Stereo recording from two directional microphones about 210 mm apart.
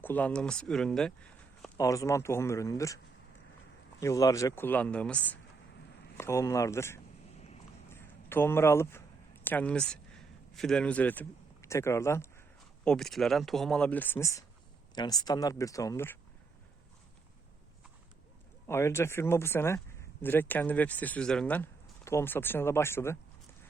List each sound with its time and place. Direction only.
0.0 s speech: 10° left (ahead or behind)
1.8 s speech: 15° left (ahead or behind)
4.0 s speech: 15° left (ahead or behind)
7.9 s a sound: 10° left (ahead or behind)
12.8 s speech: 5° left (ahead or behind)
18.7 s speech: 10° left (ahead or behind)